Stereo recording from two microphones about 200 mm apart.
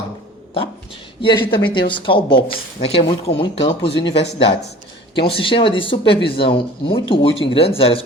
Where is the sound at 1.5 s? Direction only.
25° left (ahead or behind).